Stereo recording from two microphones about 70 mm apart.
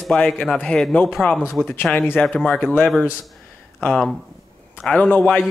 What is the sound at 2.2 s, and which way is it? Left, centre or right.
Speech, centre.